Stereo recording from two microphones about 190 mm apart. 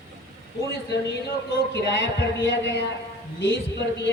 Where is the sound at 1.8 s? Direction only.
65° left (ahead or behind).